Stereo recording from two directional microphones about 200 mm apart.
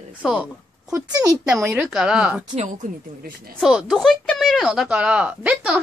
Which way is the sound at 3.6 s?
Centre (ahead or behind).